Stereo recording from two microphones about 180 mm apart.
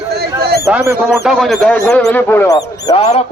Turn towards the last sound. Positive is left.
turn(degrees=25)  # may be behind; listen again after turning